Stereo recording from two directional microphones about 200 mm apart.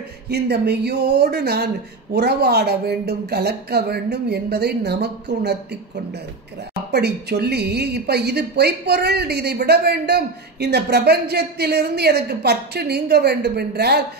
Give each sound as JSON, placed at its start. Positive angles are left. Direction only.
{"t": 0.3, "sound": "a woman's voice", "side_deg": -55}
{"t": 6.9, "sound": "a woman's voice", "side_deg": -55}